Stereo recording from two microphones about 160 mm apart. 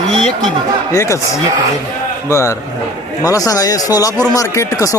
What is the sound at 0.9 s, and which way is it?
Speech, 20° left (ahead or behind).